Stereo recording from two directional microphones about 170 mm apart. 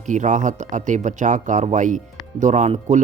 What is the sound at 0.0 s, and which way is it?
Speech, 45° right (ahead or behind).